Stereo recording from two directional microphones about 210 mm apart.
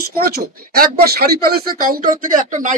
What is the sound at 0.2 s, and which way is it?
Speech, 45° right (ahead or behind).